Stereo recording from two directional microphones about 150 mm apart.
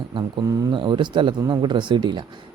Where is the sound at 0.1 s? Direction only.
25° right (ahead or behind).